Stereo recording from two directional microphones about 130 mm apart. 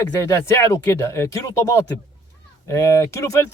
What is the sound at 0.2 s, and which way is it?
Speech, 20° left (ahead or behind).